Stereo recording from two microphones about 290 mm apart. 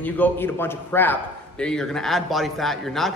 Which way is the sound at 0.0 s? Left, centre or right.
Centre.